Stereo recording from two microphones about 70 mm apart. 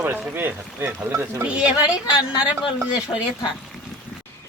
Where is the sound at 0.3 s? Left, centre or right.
Right.